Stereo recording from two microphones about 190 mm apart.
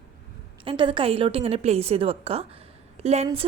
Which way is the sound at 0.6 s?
25° right (ahead or behind).